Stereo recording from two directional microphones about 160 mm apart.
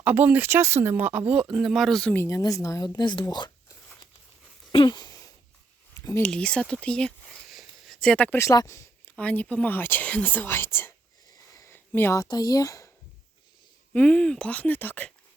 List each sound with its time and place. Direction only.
0.0 s speech: 10° right (ahead or behind)
2.1 s a woman's voice: 20° left (ahead or behind)
4.7 s a sound: 30° left (ahead or behind)
5.9 s speech: 15° left (ahead or behind)
6.3 s speech: 5° left (ahead or behind)
11.5 s a sound: 20° left (ahead or behind)
11.9 s a woman's voice: 15° left (ahead or behind)
13.9 s speech: 5° left (ahead or behind)